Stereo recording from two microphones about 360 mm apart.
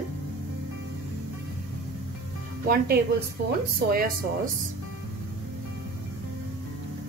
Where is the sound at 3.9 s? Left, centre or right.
Right.